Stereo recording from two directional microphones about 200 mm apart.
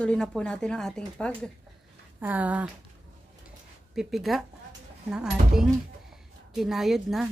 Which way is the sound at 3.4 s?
Centre (ahead or behind).